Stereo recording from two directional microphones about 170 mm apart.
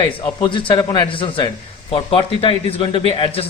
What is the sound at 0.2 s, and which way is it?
A man's voice, 25° left (ahead or behind).